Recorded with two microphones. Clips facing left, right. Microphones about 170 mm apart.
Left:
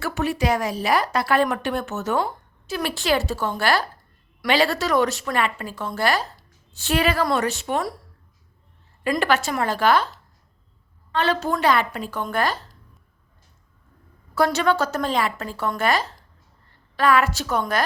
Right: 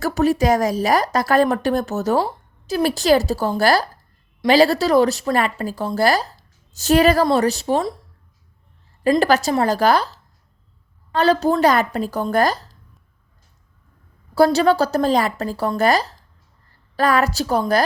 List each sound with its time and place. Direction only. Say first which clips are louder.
0.0 s speech: right 6 dB; 40° right (ahead or behind)
9.0 s speech: right 5 dB; 35° right (ahead or behind)
11.1 s speech: right 6 dB; 40° right (ahead or behind)
14.3 s speech: right 5 dB; 35° right (ahead or behind)